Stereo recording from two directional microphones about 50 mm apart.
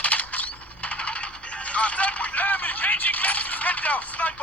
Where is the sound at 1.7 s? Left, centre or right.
Left.